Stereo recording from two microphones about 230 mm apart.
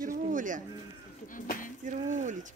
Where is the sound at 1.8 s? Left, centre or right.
Right.